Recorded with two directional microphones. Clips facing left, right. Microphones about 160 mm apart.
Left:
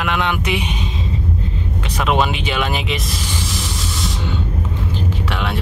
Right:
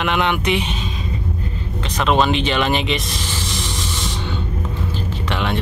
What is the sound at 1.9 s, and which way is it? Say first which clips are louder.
Speech: right 2 dB; 10° left (ahead or behind).